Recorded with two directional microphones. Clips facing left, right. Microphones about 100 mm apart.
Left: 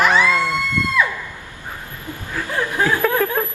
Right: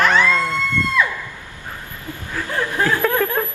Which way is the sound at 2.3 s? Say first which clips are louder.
Even; 10° left (ahead or behind).